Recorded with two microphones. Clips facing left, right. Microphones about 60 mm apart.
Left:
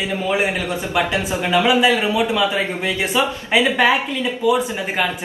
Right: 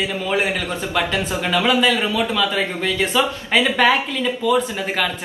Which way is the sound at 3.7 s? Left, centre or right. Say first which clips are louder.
Even; centre.